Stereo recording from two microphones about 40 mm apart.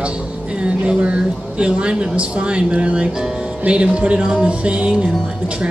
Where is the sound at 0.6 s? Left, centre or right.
Right.